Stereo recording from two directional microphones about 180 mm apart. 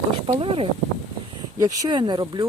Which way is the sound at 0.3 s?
30° right (ahead or behind).